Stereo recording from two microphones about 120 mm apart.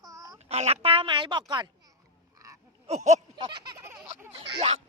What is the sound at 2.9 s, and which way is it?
Speech, 70° right (ahead or behind).